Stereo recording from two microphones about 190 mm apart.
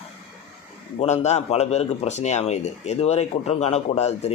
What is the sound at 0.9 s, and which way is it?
A man's voice, 35° left (ahead or behind).